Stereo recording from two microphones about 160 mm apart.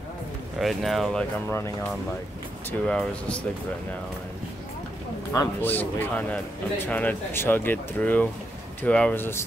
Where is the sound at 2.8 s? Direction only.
5° left (ahead or behind).